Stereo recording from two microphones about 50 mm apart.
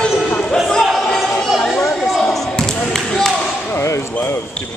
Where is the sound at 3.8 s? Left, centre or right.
Left.